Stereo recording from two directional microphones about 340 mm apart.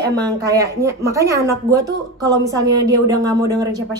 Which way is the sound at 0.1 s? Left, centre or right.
Centre.